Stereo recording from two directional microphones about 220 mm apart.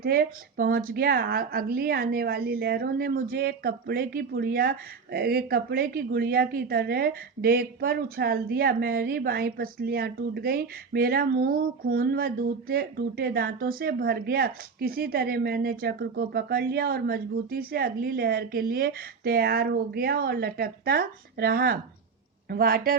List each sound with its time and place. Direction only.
0.0 s a woman's voice: 45° right (ahead or behind)